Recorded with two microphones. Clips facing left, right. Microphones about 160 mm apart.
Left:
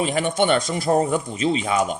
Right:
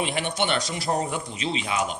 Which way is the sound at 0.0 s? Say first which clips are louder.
Left 6 dB; 45° left (ahead or behind).